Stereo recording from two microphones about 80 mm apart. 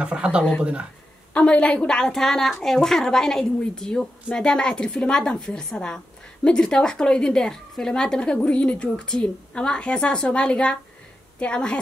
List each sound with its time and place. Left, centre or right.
0.0 s speech: centre
1.3 s a woman's voice: centre